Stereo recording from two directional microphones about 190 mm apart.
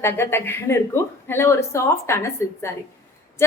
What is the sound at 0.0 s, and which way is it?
A woman's voice, 10° left (ahead or behind).